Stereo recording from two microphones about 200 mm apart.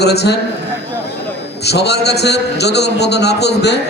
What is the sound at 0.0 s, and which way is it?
Speech, 55° left (ahead or behind).